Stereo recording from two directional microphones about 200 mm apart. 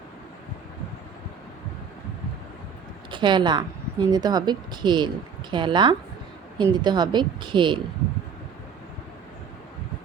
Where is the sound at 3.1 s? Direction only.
25° right (ahead or behind).